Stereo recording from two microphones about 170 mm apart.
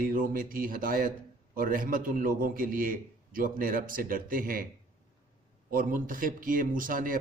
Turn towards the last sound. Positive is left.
turn(degrees=-55)  # may be behind; listen again after turning